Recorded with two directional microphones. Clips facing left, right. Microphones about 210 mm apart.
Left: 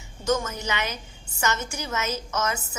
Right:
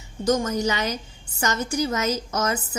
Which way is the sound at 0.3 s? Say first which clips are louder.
Right 4 dB; 35° right (ahead or behind).